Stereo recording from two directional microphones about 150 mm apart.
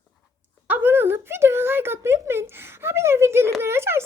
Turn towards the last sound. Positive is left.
turn(degrees=-15)  # may be behind; listen again after turning